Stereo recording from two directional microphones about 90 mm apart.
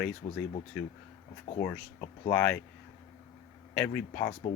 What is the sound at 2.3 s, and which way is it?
Speech, 20° left (ahead or behind).